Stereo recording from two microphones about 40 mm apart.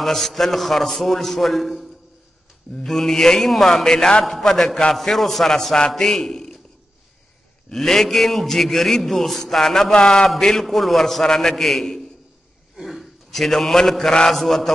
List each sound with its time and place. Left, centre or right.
0.0 s a man's voice: centre
7.7 s a man's voice: centre
9.9 s a man's voice: centre
10.2 s a man's voice: centre
12.7 s a sound: centre
14.3 s a man's voice: centre